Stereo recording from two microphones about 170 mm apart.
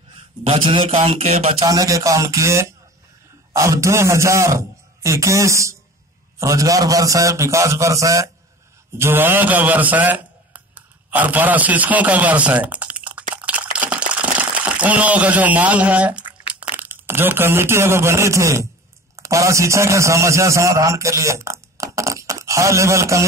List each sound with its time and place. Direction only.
0.7 s speech: 30° right (ahead or behind)
1.7 s a man's voice: 20° right (ahead or behind)
13.3 s a sound: 10° right (ahead or behind)
19.1 s a man's voice: 20° right (ahead or behind)